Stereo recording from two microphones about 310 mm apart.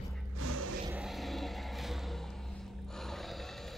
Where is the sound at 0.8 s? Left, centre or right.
Centre.